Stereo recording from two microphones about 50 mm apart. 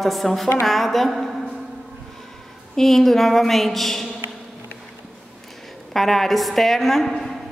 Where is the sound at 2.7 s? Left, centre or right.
Centre.